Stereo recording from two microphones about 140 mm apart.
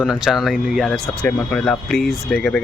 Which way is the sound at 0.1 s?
Centre (ahead or behind).